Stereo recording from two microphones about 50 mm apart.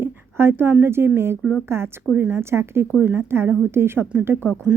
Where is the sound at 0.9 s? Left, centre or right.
Right.